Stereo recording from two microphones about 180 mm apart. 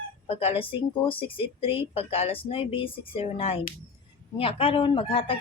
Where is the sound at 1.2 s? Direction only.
30° left (ahead or behind).